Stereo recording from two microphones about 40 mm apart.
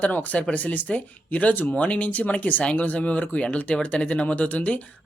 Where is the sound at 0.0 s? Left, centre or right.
Left.